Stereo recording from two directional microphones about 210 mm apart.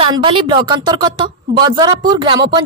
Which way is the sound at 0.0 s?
25° right (ahead or behind).